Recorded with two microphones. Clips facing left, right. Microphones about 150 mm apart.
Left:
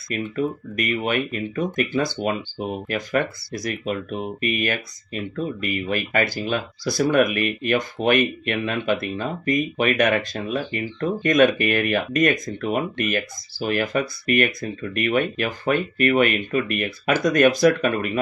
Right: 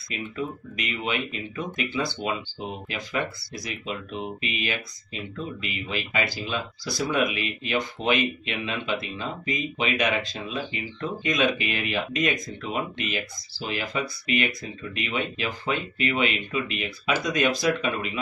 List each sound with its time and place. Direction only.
0.1 s speech: 50° left (ahead or behind)